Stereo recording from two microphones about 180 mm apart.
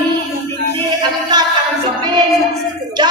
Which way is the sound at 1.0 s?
25° right (ahead or behind).